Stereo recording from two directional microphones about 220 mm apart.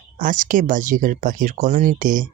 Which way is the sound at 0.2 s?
35° right (ahead or behind).